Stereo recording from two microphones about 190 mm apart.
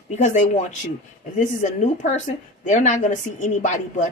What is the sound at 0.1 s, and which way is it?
Speech, 40° left (ahead or behind).